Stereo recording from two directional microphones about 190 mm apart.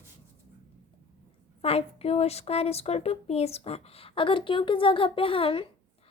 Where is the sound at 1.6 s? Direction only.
30° left (ahead or behind).